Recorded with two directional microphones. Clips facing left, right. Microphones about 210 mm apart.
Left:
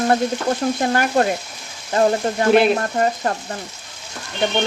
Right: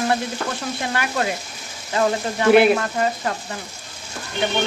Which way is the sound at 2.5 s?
5° right (ahead or behind).